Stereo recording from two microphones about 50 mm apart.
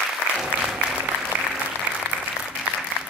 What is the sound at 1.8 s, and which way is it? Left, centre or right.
Applause, right.